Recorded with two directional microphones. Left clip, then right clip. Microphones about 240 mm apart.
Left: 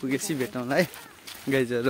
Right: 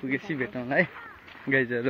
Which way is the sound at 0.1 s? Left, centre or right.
Left.